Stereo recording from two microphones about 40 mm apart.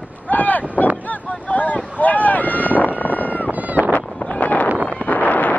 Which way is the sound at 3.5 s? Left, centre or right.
Right.